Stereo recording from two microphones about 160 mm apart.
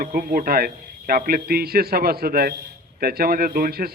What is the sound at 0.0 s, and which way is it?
A man's voice, 65° right (ahead or behind).